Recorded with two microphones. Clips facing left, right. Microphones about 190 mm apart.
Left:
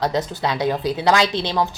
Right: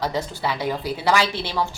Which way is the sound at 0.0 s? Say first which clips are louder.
Left 3 dB; 15° left (ahead or behind).